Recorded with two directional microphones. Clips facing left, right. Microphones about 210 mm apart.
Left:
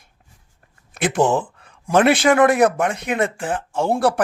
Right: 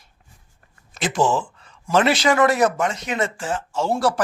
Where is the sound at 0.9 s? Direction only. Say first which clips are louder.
Left 3 dB; 55° left (ahead or behind).